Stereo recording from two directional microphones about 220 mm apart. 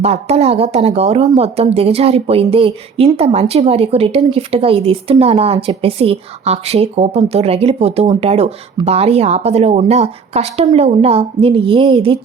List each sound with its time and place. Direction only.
0.0 s speech: 30° right (ahead or behind)